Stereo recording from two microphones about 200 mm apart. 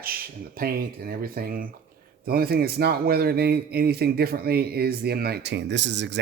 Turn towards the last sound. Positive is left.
turn(degrees=-60)  # may be behind; listen again after turning